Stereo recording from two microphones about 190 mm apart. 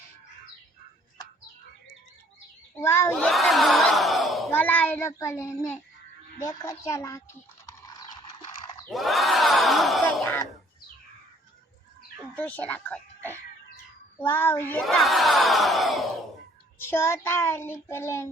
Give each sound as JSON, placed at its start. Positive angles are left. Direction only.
{"t": 2.7, "sound": "a sound", "side_deg": 15}
{"t": 4.5, "sound": "a child's voice", "side_deg": 10}
{"t": 6.7, "sound": "child singing", "side_deg": 15}
{"t": 7.7, "sound": "clip-clop", "side_deg": 20}
{"t": 8.9, "sound": "crowd", "side_deg": 0}
{"t": 12.3, "sound": "speech", "side_deg": 10}
{"t": 14.2, "sound": "child singing", "side_deg": 10}
{"t": 14.8, "sound": "crowd", "side_deg": 0}
{"t": 16.7, "sound": "child singing", "side_deg": 10}